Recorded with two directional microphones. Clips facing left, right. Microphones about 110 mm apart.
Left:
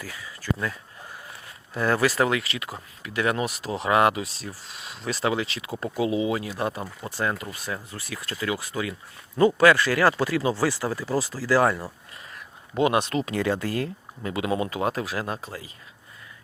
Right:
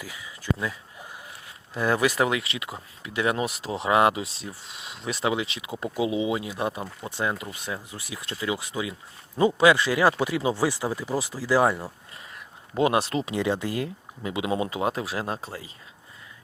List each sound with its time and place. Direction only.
0.0 s speech: 15° right (ahead or behind)
1.7 s speech: 15° right (ahead or behind); by 15.7 s 35° right (ahead or behind)